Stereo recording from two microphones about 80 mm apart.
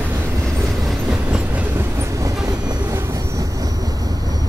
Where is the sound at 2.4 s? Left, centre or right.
Right.